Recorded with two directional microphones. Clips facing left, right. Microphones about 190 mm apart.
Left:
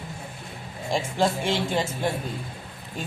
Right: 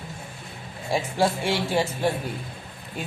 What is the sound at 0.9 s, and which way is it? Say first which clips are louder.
Speech: right 1 dB; 10° right (ahead or behind).